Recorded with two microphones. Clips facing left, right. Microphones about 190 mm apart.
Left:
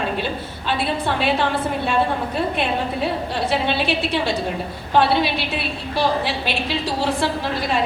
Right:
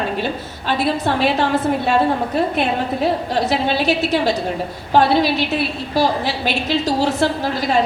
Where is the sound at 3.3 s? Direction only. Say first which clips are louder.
Right 3 dB; 40° right (ahead or behind).